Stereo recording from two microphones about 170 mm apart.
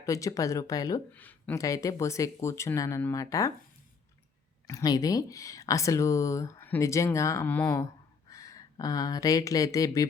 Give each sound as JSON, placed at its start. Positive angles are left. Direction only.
{"t": 0.0, "sound": "speech", "side_deg": 20}
{"t": 1.1, "sound": "speech", "side_deg": 10}
{"t": 4.6, "sound": "speech", "side_deg": 20}